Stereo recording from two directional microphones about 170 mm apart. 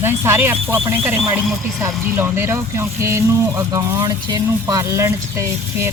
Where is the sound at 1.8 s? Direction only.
15° right (ahead or behind).